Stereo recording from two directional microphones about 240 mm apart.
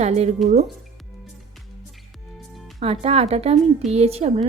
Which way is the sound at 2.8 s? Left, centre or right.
Right.